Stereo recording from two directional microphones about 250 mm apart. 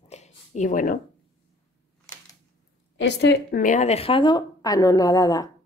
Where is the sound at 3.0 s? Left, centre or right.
Left.